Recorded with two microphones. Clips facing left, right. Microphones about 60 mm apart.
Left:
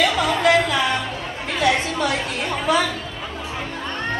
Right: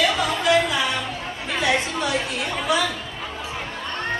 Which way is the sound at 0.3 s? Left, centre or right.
Left.